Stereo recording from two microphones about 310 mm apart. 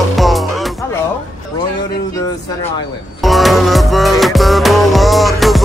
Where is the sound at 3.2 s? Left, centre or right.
Centre.